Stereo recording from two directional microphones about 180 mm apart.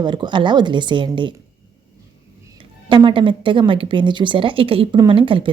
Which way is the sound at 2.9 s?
25° right (ahead or behind).